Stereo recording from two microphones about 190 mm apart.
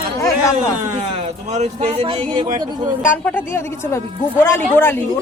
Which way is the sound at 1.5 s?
35° right (ahead or behind).